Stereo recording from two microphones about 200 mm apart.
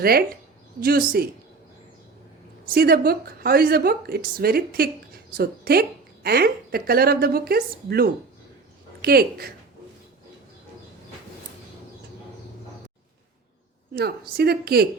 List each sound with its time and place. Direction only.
0.0 s a woman's voice: 50° right (ahead or behind)
2.6 s a woman's voice: 50° right (ahead or behind)
13.9 s a woman's voice: 50° right (ahead or behind)